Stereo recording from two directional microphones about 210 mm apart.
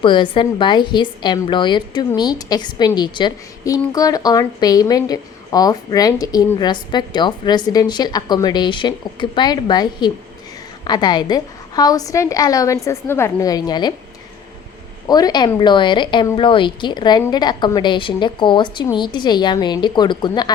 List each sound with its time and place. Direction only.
0.0 s a woman's voice: 25° left (ahead or behind)
15.0 s a woman's voice: 20° left (ahead or behind)